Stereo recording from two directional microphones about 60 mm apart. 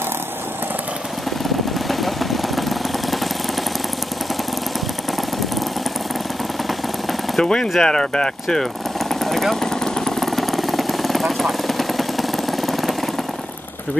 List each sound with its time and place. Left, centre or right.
1.9 s vehicle: centre
7.3 s speech: centre
9.1 s vehicle: centre